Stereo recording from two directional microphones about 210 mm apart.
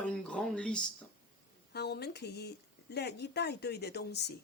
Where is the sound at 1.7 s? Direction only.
50° left (ahead or behind).